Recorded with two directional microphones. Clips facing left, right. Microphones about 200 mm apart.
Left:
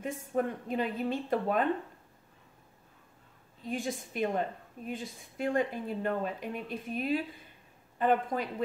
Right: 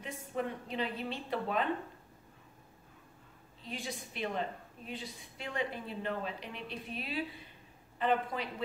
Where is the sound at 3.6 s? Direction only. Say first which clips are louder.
Left 7 dB; 50° left (ahead or behind).